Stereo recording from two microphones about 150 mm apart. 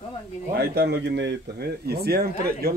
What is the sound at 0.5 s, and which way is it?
Speech, 90° right.